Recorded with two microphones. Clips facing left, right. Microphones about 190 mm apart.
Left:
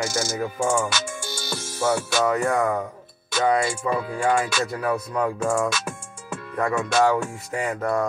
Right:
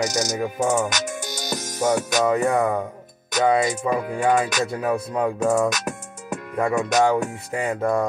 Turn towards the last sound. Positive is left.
turn(degrees=-15)  # may be behind; listen again after turning